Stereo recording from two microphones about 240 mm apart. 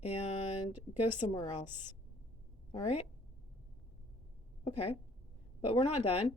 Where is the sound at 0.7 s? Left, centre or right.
Centre.